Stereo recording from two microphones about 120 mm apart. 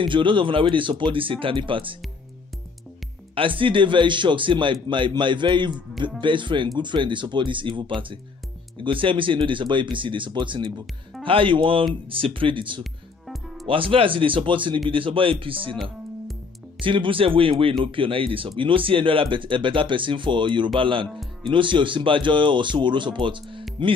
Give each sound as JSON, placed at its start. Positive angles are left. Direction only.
{"t": 0.0, "sound": "speech", "side_deg": -45}
{"t": 3.3, "sound": "a man's voice", "side_deg": -45}
{"t": 16.8, "sound": "speech", "side_deg": -45}